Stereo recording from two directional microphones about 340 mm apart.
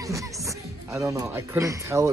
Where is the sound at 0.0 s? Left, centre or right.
Centre.